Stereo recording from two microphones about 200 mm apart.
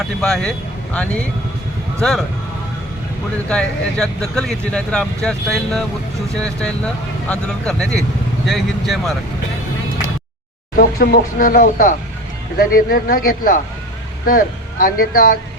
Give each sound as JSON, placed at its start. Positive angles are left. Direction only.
{"t": 0.2, "sound": "speech", "side_deg": 0}
{"t": 3.5, "sound": "speech", "side_deg": 5}
{"t": 10.8, "sound": "speech", "side_deg": 45}